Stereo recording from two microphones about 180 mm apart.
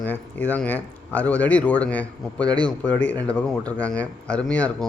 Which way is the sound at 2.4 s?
25° right (ahead or behind).